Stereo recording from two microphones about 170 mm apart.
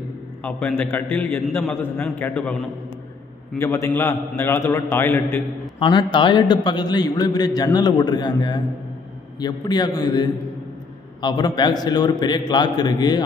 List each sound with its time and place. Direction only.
0.4 s a man's voice: 10° left (ahead or behind)
3.5 s a man's voice: 15° left (ahead or behind)
5.8 s a man's voice: 25° left (ahead or behind)